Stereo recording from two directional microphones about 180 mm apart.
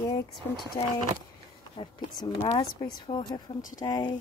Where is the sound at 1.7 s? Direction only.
30° left (ahead or behind).